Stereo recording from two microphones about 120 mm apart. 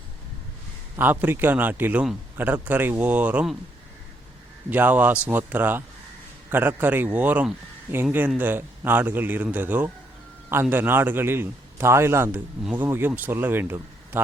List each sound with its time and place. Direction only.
0.9 s a man's voice: 15° right (ahead or behind)
4.7 s a man's voice: 15° right (ahead or behind)